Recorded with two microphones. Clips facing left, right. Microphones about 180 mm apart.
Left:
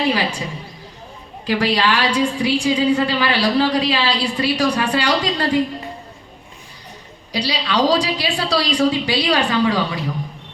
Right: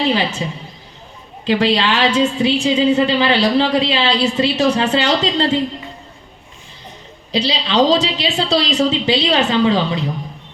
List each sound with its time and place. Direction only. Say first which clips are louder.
0.1 s a woman's voice: right 2 dB; 25° right (ahead or behind)
1.5 s a woman's voice: right 3 dB; 25° right (ahead or behind)
7.3 s a woman's voice: right 4 dB; 25° right (ahead or behind)